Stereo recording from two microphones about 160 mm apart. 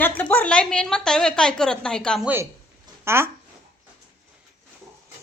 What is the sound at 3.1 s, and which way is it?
Speech, 15° right (ahead or behind).